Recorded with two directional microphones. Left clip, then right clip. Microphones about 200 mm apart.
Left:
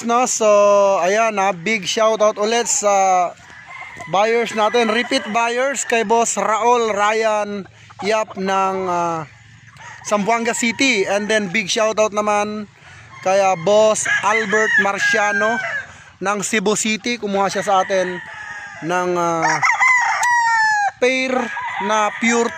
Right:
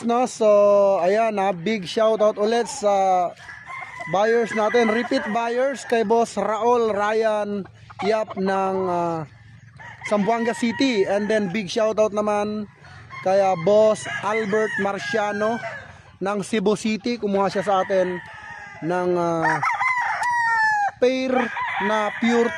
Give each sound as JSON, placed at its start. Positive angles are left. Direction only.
{"t": 0.0, "sound": "speech", "side_deg": 0}
{"t": 19.4, "sound": "chicken", "side_deg": 30}
{"t": 21.0, "sound": "speech", "side_deg": 0}